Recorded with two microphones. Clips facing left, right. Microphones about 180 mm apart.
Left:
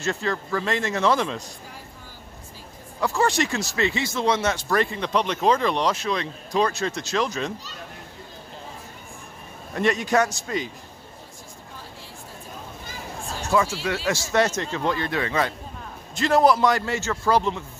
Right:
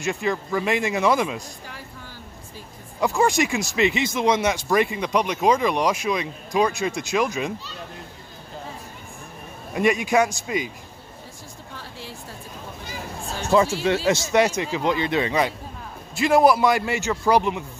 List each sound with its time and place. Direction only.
0.0 s speech: 15° right (ahead or behind)
3.0 s speech: 15° right (ahead or behind)
9.8 s speech: 10° right (ahead or behind)
11.7 s a sound: 75° right (ahead or behind)
13.5 s speech: 25° right (ahead or behind)